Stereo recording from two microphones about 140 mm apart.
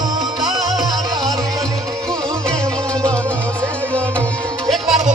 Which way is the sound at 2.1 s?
5° left (ahead or behind).